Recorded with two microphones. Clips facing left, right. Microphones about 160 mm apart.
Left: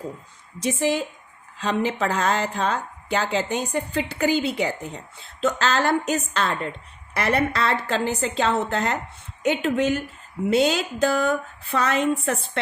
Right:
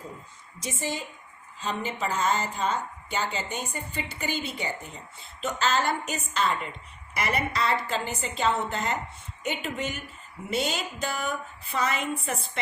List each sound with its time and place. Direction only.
0.6 s a woman's voice: 75° left (ahead or behind); by 4.9 s 90° left
5.4 s a woman's voice: 80° left